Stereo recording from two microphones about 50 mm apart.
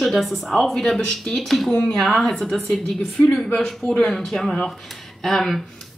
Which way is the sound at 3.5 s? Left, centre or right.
Centre.